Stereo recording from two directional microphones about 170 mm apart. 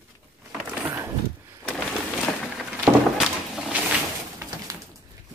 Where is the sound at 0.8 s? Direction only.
15° right (ahead or behind).